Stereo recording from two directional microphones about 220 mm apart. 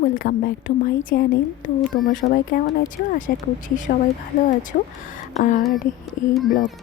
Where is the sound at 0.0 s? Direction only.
40° left (ahead or behind).